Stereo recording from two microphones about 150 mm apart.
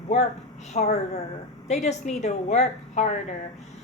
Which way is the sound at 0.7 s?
50° left (ahead or behind).